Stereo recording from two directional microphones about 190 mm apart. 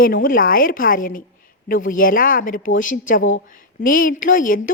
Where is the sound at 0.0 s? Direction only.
50° left (ahead or behind).